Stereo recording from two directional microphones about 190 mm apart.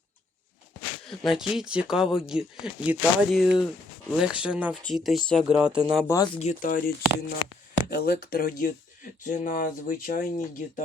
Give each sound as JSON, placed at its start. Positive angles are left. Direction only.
{"t": 1.2, "sound": "speech", "side_deg": 0}
{"t": 6.1, "sound": "speech", "side_deg": 20}
{"t": 6.4, "sound": "speech", "side_deg": 40}